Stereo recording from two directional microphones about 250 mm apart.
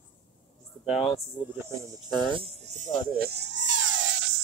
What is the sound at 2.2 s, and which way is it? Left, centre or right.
Speech, centre.